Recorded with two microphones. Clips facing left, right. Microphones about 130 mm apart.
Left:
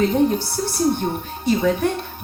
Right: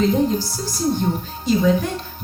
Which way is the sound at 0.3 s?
65° left (ahead or behind).